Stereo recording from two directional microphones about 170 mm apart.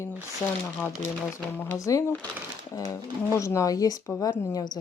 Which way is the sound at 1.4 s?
10° left (ahead or behind).